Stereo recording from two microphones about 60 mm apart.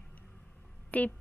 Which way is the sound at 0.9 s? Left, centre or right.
Left.